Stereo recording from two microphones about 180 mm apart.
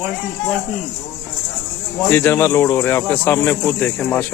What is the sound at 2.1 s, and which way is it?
Speech, 10° left (ahead or behind).